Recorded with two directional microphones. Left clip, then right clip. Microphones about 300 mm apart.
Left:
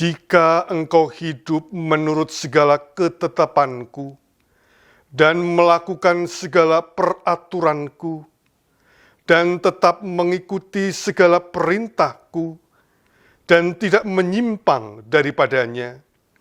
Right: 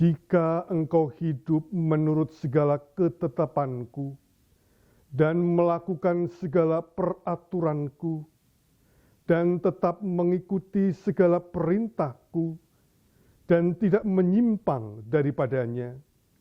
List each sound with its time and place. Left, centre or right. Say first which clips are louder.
0.0 s speech: left 10 dB; centre
5.1 s speech: left 9 dB; centre
9.2 s speech: left 9 dB; centre
12.3 s speech: left 5 dB; left
13.5 s speech: left 9 dB; centre